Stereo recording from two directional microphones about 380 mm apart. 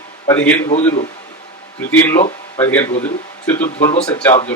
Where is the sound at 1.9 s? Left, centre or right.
Centre.